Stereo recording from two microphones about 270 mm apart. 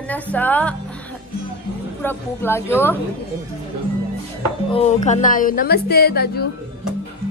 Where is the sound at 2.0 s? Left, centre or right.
Centre.